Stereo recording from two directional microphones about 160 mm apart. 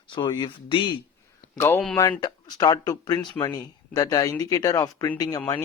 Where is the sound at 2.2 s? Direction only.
25° left (ahead or behind).